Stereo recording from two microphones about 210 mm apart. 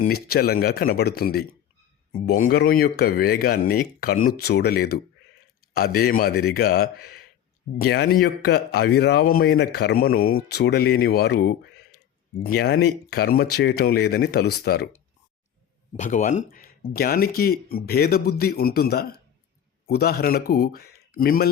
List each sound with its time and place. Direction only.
0.0 s speech: 45° left (ahead or behind)
16.0 s speech: 35° left (ahead or behind)